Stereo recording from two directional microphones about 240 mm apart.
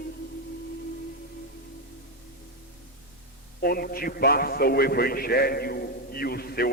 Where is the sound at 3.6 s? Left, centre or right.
Left.